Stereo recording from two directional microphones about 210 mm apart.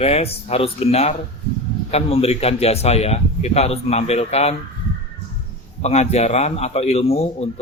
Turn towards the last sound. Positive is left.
turn(degrees=30)  # may be behind; listen again after turning